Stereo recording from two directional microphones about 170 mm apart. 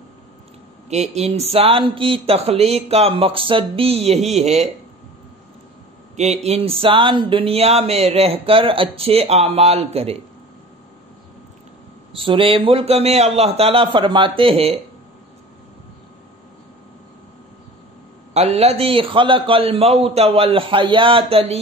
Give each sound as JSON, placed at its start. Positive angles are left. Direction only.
{"t": 0.8, "sound": "speech", "side_deg": -40}
{"t": 6.1, "sound": "speech", "side_deg": -40}
{"t": 12.1, "sound": "speech", "side_deg": -30}
{"t": 18.3, "sound": "speech", "side_deg": -40}